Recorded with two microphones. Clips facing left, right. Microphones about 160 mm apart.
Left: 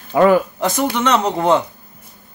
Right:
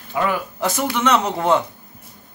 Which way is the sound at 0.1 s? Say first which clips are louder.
Left 10 dB; 45° left (ahead or behind).